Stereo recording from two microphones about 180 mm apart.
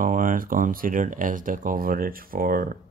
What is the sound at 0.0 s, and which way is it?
Speech, 50° right (ahead or behind).